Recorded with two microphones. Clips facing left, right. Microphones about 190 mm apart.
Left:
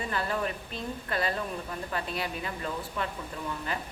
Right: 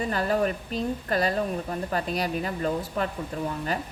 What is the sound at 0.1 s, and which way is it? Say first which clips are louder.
Speech: right 6 dB; 40° right (ahead or behind).